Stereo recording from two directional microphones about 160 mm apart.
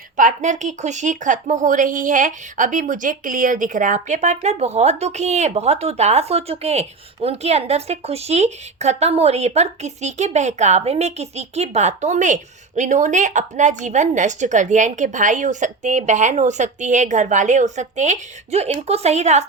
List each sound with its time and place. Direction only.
0.2 s speech: 50° right (ahead or behind)